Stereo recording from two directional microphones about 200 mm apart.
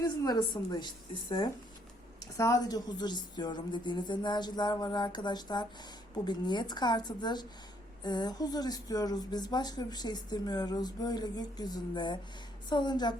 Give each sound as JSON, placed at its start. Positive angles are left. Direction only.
{"t": 0.0, "sound": "speech", "side_deg": 20}